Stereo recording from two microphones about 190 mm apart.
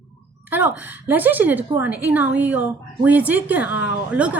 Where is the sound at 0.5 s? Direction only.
10° right (ahead or behind).